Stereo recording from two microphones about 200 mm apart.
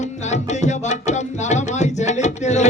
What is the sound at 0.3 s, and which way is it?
Music, 35° left (ahead or behind).